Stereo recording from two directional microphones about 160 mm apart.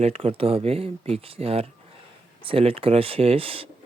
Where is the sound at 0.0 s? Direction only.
35° right (ahead or behind).